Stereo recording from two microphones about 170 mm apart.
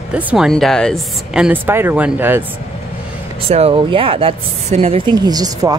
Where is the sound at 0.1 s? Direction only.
10° right (ahead or behind).